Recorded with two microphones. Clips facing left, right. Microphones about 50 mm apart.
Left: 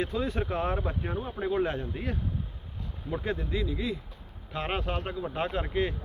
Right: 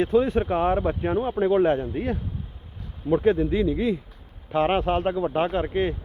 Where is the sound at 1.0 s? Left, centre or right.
Right.